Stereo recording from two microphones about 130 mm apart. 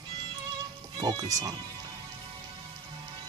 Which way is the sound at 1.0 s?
30° right (ahead or behind).